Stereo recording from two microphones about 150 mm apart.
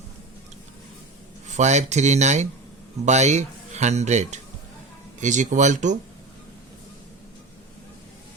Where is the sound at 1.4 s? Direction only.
50° right (ahead or behind).